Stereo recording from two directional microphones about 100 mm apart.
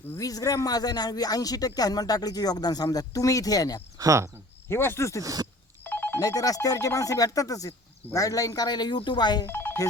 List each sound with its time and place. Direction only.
0.2 s speech: 35° left (ahead or behind)
3.9 s speech: 35° right (ahead or behind)
4.7 s speech: 25° left (ahead or behind)
5.2 s speech: 40° right (ahead or behind)
5.8 s telephone bell ringing: 20° left (ahead or behind)
6.2 s speech: 35° left (ahead or behind)
9.5 s telephone bell ringing: 20° left (ahead or behind)